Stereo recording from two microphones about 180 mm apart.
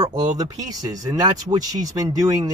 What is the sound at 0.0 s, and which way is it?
Speech, 20° right (ahead or behind).